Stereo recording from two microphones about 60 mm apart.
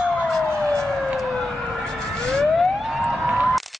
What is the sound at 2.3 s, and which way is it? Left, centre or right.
Emergency vehicle, centre.